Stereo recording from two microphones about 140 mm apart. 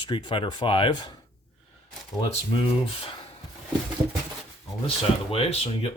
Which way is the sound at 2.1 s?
40° left (ahead or behind).